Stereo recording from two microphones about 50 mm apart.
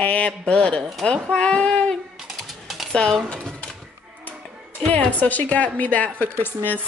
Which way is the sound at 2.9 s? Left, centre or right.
Centre.